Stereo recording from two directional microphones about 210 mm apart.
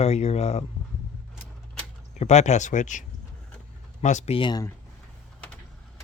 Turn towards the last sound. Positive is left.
turn(degrees=20)  # may be behind; listen again after turning